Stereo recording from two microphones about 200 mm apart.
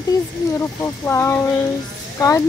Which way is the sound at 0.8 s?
10° left (ahead or behind).